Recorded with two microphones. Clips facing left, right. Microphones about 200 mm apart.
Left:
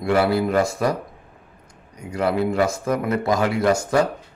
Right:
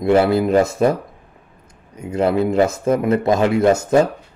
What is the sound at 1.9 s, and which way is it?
A man's voice, 25° right (ahead or behind).